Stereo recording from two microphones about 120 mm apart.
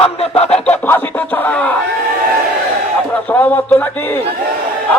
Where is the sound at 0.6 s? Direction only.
15° left (ahead or behind).